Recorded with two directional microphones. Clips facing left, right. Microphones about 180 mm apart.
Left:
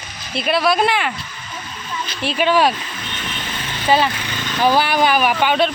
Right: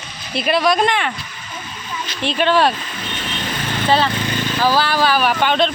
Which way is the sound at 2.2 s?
5° left (ahead or behind).